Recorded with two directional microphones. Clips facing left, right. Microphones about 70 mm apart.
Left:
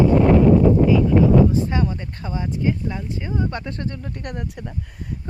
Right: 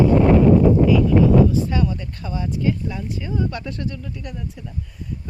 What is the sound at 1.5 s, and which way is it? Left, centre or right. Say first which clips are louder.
Speech: even; left.